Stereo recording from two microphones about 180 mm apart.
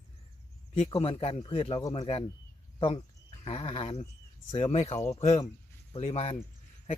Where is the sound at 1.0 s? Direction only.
35° left (ahead or behind).